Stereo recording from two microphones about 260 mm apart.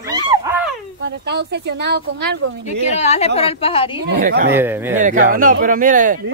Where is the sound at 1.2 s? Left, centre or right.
Right.